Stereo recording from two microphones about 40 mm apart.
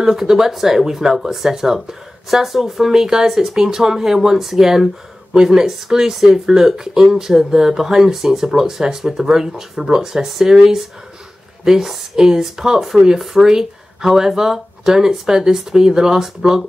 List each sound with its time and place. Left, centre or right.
0.0 s speech: centre